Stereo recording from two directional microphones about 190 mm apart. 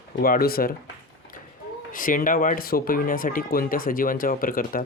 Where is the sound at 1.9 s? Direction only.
45° left (ahead or behind).